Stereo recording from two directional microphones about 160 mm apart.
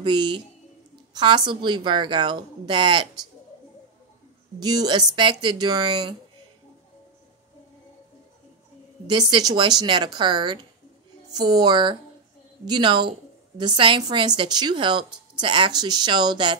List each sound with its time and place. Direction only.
0.0 s a woman's voice: 30° right (ahead or behind)
4.6 s a woman's voice: 25° right (ahead or behind)
9.3 s a woman's voice: 25° right (ahead or behind)